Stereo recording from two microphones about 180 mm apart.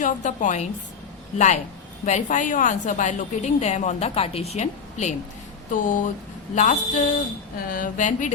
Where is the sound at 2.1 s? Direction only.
40° left (ahead or behind).